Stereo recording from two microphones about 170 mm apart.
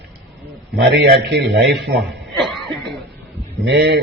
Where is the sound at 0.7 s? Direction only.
65° right (ahead or behind); by 2.1 s 90° right.